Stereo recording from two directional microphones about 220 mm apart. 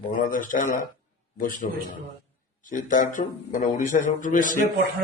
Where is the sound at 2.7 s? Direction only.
35° left (ahead or behind).